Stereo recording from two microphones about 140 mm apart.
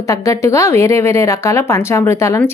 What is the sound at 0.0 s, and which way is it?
Speech, 20° left (ahead or behind).